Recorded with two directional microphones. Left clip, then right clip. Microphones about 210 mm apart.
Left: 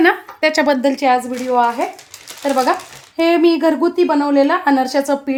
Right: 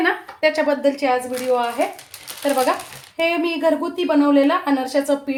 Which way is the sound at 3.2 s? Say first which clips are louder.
Left 6 dB; 45° left (ahead or behind).